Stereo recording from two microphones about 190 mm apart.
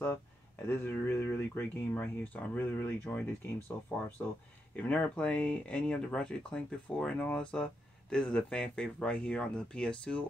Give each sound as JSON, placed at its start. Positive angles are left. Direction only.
{"t": 0.7, "sound": "speech", "side_deg": 10}
{"t": 4.7, "sound": "speech", "side_deg": 10}